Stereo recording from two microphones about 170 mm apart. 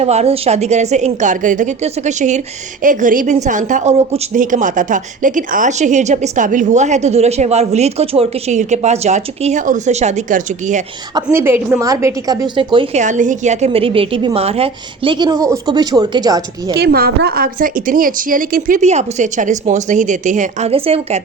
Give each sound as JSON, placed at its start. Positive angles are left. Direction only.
{"t": 0.0, "sound": "a woman's voice", "side_deg": -40}
{"t": 11.1, "sound": "a woman's voice", "side_deg": -15}
{"t": 13.0, "sound": "a woman's voice", "side_deg": -45}
{"t": 16.7, "sound": "a woman's voice", "side_deg": -65}